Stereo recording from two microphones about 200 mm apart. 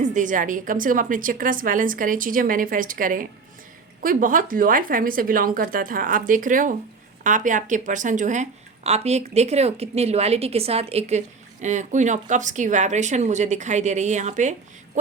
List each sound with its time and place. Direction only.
0.0 s a woman's voice: 40° right (ahead or behind)